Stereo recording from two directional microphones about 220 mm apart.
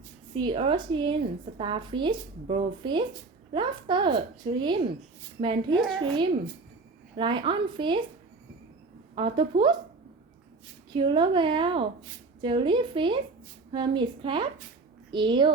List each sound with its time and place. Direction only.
0.3 s a woman's voice: 25° right (ahead or behind)
9.1 s a woman's voice: 25° right (ahead or behind)
10.9 s a woman's voice: 20° right (ahead or behind)